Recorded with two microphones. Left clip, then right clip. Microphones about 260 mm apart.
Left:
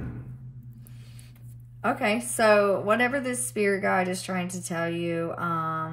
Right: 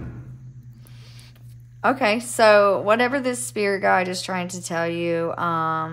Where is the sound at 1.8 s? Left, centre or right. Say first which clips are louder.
Right 6 dB; centre.